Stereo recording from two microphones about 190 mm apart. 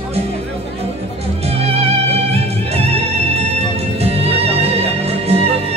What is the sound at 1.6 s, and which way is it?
Music, 30° right (ahead or behind).